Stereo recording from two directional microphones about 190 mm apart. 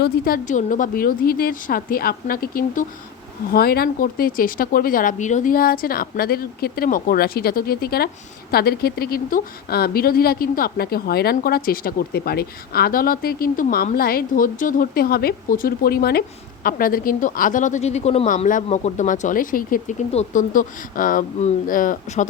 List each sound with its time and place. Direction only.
0.0 s speech: 45° left (ahead or behind)